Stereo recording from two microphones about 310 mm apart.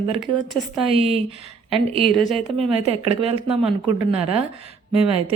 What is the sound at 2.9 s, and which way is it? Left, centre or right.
A woman's voice, centre.